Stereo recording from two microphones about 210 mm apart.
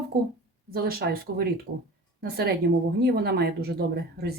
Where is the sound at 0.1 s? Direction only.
45° right (ahead or behind).